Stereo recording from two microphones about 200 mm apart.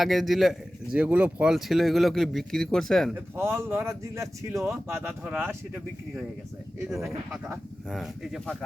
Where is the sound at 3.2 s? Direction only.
10° right (ahead or behind).